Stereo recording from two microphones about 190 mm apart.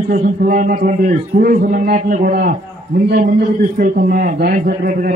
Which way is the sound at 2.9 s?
60° right (ahead or behind).